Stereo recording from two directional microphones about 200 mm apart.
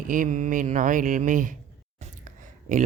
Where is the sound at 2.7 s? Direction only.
40° right (ahead or behind).